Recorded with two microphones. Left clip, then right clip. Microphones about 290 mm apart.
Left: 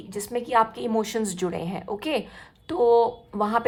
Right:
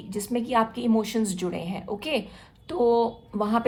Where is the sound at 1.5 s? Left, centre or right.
Left.